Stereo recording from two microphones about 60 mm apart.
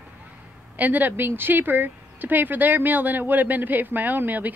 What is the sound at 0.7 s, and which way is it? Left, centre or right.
Speech, right.